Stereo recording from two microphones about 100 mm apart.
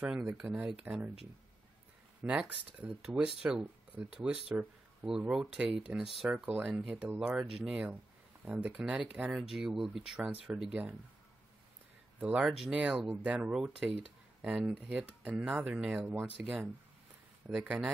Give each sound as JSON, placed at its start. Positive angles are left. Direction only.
{"t": 0.2, "sound": "speech", "side_deg": -20}
{"t": 2.2, "sound": "speech", "side_deg": -10}
{"t": 12.2, "sound": "speech", "side_deg": -15}